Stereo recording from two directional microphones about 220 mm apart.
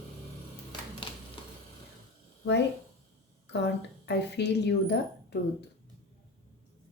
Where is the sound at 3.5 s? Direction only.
50° left (ahead or behind).